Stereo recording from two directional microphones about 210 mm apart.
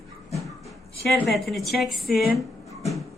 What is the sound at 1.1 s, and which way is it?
A woman's voice, centre (ahead or behind).